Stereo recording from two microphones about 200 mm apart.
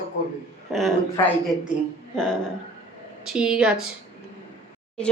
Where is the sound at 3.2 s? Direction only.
5° right (ahead or behind).